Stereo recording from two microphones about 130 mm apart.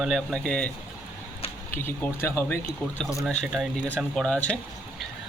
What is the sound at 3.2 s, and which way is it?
Speech, centre (ahead or behind).